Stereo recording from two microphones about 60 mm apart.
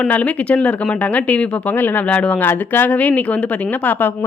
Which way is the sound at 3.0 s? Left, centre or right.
Left.